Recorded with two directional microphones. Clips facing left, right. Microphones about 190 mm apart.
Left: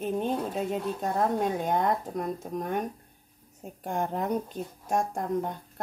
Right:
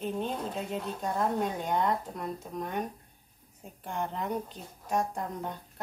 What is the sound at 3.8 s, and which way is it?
A woman's voice, 45° left (ahead or behind).